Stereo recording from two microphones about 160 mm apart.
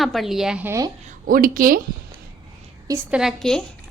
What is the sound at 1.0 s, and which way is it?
Speech, 60° right (ahead or behind).